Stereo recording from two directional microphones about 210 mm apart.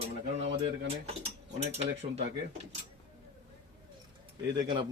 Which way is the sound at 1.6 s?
30° right (ahead or behind).